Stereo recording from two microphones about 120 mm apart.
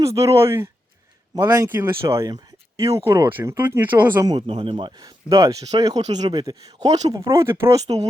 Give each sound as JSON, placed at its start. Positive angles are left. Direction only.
{"t": 0.0, "sound": "speech", "side_deg": -25}
{"t": 4.4, "sound": "speech", "side_deg": -50}
{"t": 4.9, "sound": "speech", "side_deg": -30}